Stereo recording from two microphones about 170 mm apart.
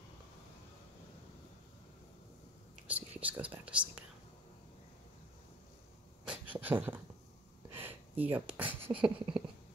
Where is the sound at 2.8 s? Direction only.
10° right (ahead or behind).